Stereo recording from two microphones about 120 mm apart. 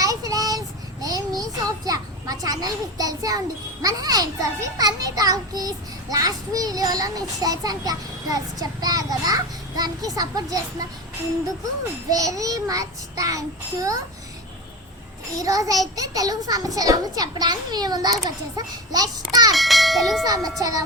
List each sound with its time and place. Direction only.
0.0 s child singing: 30° right (ahead or behind)
1.0 s a sound: 30° right (ahead or behind)
4.8 s a child's voice: 30° right (ahead or behind)
12.1 s a child's voice: 30° right (ahead or behind)
15.4 s a child's voice: 30° right (ahead or behind)
19.5 s a sound: centre (ahead or behind)
20.2 s a child's voice: 30° right (ahead or behind)